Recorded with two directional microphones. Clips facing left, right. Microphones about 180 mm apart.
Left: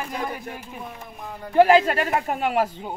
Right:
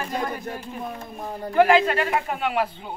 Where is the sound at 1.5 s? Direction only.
35° left (ahead or behind).